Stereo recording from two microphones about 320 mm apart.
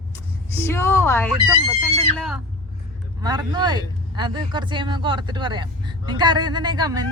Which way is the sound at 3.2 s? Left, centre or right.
Centre.